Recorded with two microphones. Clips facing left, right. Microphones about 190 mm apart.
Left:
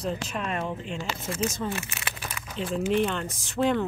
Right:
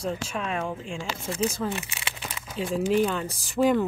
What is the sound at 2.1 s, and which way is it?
Crumpling, 25° right (ahead or behind).